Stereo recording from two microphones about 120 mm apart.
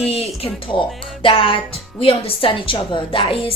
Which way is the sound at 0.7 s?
45° left (ahead or behind).